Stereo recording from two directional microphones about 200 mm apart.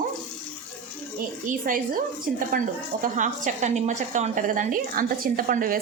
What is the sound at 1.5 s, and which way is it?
A woman's voice, 45° right (ahead or behind).